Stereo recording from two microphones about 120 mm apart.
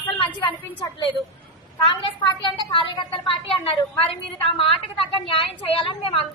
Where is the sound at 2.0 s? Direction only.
40° left (ahead or behind).